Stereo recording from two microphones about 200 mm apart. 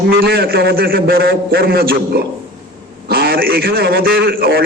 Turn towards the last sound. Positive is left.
turn(degrees=-50)  # may be behind; listen again after turning